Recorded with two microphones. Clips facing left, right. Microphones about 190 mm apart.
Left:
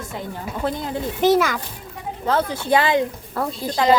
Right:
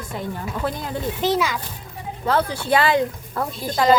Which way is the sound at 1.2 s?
50° left (ahead or behind).